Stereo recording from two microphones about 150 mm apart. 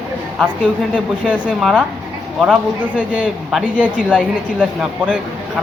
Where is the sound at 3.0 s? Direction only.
5° right (ahead or behind).